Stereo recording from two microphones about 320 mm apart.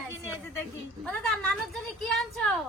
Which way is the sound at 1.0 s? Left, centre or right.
Centre.